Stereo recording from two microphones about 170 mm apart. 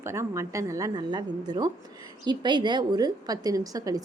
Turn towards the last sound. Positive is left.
turn(degrees=-20)  # may be behind; listen again after turning